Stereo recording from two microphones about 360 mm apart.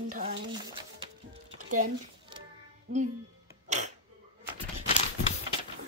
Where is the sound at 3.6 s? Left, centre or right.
Centre.